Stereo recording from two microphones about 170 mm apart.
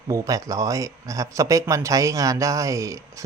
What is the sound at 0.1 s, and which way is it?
A man's voice, 20° right (ahead or behind).